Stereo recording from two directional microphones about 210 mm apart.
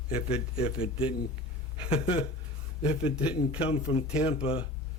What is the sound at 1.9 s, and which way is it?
Speech, 25° left (ahead or behind).